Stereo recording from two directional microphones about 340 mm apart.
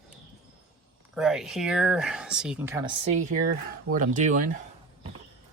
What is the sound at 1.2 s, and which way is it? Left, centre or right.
Speech, centre.